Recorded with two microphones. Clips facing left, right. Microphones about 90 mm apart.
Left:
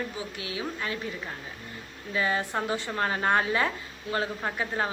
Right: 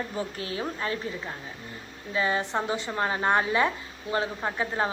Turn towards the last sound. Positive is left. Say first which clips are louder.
# right 2 dB
turn(degrees=-20)  # may be behind; listen again after turning